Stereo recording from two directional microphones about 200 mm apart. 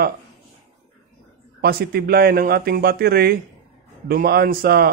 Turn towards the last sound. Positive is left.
turn(degrees=-50)  # may be behind; listen again after turning